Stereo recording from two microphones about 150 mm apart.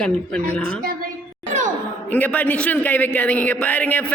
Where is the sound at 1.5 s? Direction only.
55° right (ahead or behind).